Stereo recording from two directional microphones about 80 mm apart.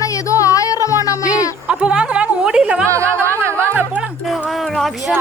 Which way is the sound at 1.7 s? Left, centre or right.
Centre.